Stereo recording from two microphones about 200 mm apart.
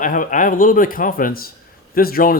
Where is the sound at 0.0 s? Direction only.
40° left (ahead or behind).